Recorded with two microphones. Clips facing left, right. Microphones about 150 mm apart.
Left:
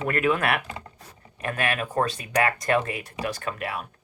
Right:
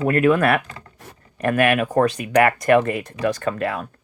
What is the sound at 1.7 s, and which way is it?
Speech, 55° right (ahead or behind).